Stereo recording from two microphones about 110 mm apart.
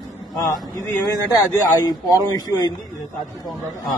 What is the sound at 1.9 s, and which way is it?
Speech, 35° left (ahead or behind).